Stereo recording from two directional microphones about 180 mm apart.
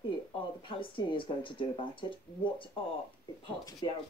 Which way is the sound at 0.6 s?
30° left (ahead or behind).